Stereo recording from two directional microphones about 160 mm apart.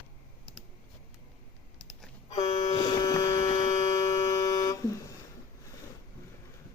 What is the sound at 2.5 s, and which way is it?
Vehicle, 45° left (ahead or behind).